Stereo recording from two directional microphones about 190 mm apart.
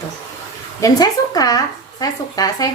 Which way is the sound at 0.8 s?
20° left (ahead or behind).